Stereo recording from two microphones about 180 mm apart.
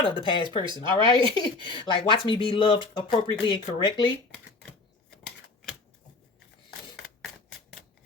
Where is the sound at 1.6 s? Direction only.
30° left (ahead or behind).